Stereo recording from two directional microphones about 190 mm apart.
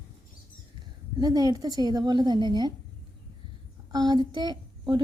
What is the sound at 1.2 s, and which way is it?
A woman's voice, 20° right (ahead or behind).